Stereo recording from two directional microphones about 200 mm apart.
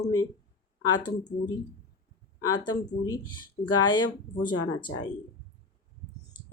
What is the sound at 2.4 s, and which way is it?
Speech, 20° left (ahead or behind).